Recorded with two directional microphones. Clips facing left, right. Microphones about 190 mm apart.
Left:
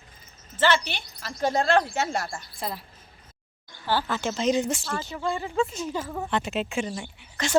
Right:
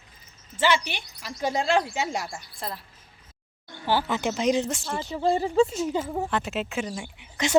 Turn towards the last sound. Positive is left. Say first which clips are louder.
# right 2 dB
turn(degrees=-15)  # may be behind; listen again after turning